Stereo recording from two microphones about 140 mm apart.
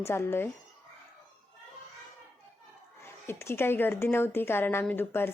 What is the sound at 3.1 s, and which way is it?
A woman's voice, 15° left (ahead or behind).